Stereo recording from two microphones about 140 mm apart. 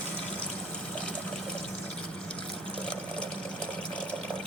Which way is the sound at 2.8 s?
10° left (ahead or behind).